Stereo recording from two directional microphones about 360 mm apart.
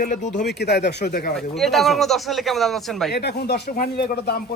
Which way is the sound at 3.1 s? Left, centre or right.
Left.